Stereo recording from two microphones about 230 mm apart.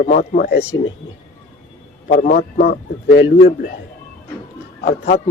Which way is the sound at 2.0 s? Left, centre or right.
Left.